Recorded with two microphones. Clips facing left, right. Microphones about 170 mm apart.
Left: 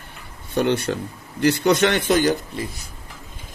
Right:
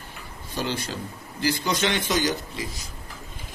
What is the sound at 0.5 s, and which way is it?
A man's voice, 65° left (ahead or behind).